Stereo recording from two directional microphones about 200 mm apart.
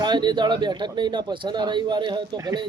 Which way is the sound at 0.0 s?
20° right (ahead or behind).